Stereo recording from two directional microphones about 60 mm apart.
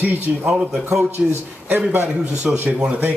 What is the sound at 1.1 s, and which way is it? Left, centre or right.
Speech, right.